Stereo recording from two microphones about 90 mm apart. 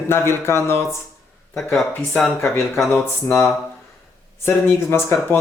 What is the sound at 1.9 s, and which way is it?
Speech, 15° left (ahead or behind).